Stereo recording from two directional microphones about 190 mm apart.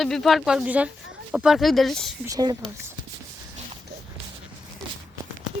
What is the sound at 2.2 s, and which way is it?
Speech, 20° right (ahead or behind).